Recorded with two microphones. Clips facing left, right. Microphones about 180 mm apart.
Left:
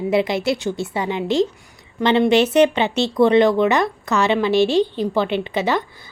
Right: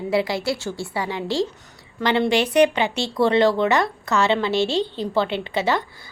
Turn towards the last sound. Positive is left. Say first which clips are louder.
# left 2 dB
turn(degrees=20)  # may be behind; listen again after turning